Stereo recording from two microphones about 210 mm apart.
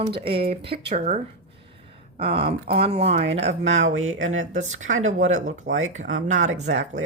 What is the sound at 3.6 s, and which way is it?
Speech, 65° right (ahead or behind).